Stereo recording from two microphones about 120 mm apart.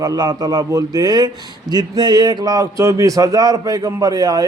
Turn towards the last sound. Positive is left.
turn(degrees=-30)  # may be behind; listen again after turning